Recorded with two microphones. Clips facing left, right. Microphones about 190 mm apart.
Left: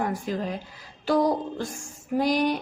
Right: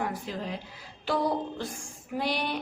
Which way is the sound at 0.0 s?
45° left (ahead or behind).